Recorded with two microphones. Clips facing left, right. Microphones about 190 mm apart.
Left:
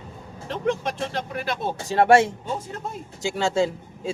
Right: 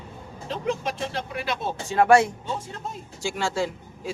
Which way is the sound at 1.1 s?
45° left (ahead or behind).